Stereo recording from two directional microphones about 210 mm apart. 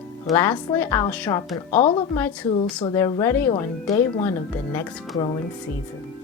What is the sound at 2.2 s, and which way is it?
Speech, 10° left (ahead or behind).